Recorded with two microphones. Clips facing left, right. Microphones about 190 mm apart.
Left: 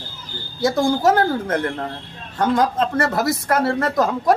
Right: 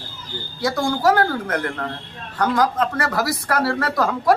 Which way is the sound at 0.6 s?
25° left (ahead or behind).